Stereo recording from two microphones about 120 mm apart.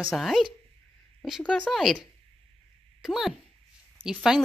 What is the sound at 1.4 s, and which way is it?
Speech, 10° left (ahead or behind).